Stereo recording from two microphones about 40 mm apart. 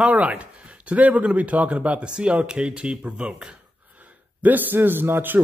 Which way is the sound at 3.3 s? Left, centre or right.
Centre.